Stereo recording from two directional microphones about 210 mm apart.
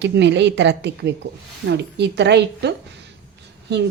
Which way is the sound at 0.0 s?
55° right (ahead or behind).